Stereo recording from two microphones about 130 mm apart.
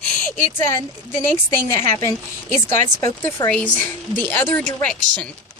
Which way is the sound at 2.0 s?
20° left (ahead or behind).